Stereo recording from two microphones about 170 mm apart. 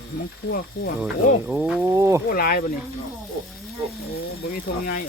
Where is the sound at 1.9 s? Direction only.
15° right (ahead or behind).